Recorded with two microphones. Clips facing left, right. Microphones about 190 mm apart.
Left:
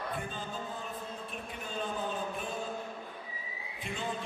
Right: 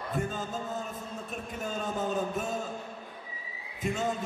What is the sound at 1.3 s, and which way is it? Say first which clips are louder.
Music: right 8 dB; 45° right (ahead or behind).